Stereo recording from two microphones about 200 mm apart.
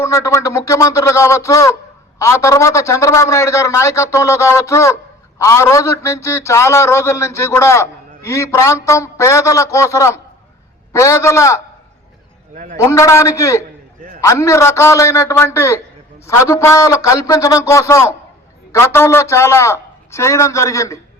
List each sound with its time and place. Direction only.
0.0 s a man's voice: 15° left (ahead or behind)
12.7 s a man's voice: 15° left (ahead or behind)